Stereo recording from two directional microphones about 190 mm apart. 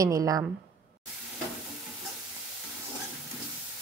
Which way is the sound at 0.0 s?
15° right (ahead or behind).